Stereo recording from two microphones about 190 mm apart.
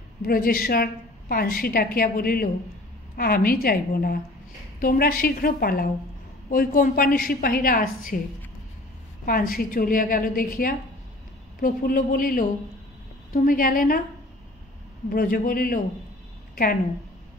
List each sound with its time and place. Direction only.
0.2 s a woman's voice: 50° left (ahead or behind)
9.2 s a woman's voice: 50° left (ahead or behind)
15.0 s a woman's voice: 45° left (ahead or behind)